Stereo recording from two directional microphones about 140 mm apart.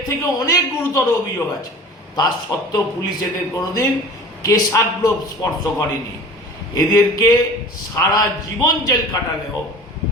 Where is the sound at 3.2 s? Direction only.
25° left (ahead or behind).